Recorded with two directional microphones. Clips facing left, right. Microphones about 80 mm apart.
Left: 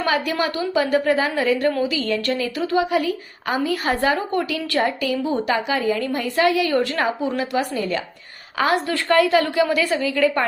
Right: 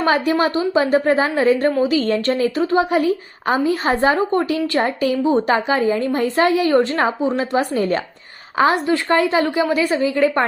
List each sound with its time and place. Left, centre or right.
0.0 s a woman's voice: right
4.8 s a woman's voice: right
7.7 s a woman's voice: right
8.5 s a woman's voice: right
10.0 s a woman's voice: right